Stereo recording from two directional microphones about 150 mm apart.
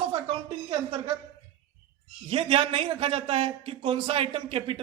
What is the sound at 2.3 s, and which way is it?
A man's voice, 40° right (ahead or behind).